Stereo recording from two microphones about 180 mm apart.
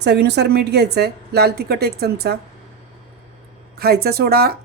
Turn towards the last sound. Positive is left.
turn(degrees=-60)  # may be behind; listen again after turning